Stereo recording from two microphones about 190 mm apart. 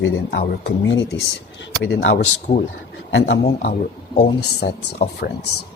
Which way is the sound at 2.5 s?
30° left (ahead or behind).